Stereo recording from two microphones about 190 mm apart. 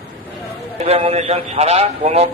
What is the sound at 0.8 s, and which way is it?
A man's voice, 35° right (ahead or behind).